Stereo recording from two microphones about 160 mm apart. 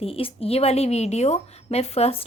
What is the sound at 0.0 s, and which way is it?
A woman's voice, 35° left (ahead or behind).